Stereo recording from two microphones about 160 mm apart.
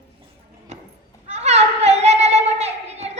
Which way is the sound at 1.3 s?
45° right (ahead or behind).